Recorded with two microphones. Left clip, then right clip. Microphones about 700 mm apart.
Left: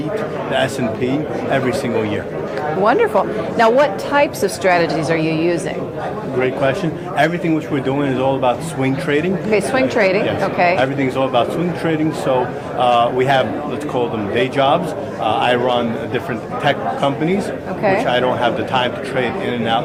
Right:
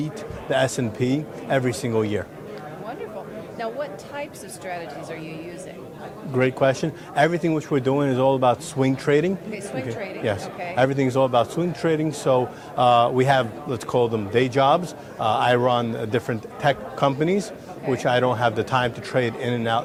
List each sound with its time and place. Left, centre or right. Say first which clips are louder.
0.5 s a man's voice: left 3 dB; right
3.6 s a woman's voice: left 17 dB; left
6.4 s a man's voice: left 3 dB; right
9.5 s a woman's voice: left 15 dB; left
10.8 s a man's voice: left 3 dB; right